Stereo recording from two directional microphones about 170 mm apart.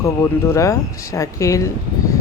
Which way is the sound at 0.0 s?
20° left (ahead or behind).